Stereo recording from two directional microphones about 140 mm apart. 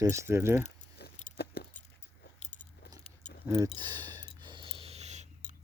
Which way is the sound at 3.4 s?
20° right (ahead or behind).